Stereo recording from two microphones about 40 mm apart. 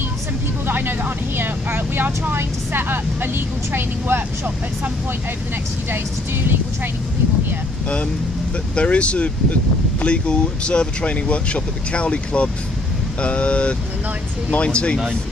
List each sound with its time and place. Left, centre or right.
0.7 s a woman's voice: right
8.7 s speech: left